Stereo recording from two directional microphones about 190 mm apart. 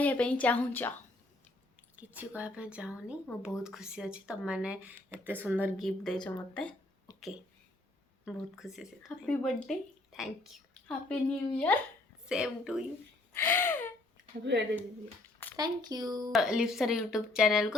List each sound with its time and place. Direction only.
0.0 s a woman's voice: 10° left (ahead or behind)
2.0 s a woman's voice: 10° right (ahead or behind); by 6.7 s 5° left (ahead or behind)
7.1 s a sound: 20° left (ahead or behind)
8.2 s speech: centre (ahead or behind)
12.2 s speech: 5° right (ahead or behind)
13.3 s gasp: 10° left (ahead or behind)
14.5 s speech: 65° right (ahead or behind)
15.5 s a child's voice: 20° right (ahead or behind)
16.3 s speech: 5° right (ahead or behind)